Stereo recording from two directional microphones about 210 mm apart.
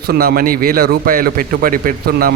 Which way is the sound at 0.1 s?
45° right (ahead or behind).